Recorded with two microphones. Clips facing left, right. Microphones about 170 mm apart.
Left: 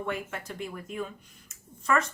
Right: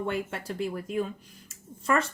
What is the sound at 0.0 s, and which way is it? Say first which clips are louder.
A woman's voice: right 3 dB; 30° right (ahead or behind).